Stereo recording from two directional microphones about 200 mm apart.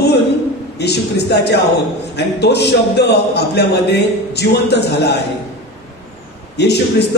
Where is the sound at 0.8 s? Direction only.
55° left (ahead or behind).